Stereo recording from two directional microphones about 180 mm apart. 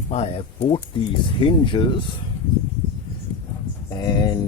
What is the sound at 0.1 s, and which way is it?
Speech, 35° left (ahead or behind).